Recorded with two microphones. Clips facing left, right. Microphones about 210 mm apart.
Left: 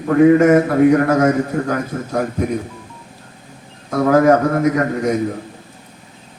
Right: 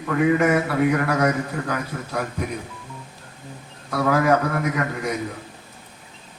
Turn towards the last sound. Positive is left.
turn(degrees=45)  # may be behind; listen again after turning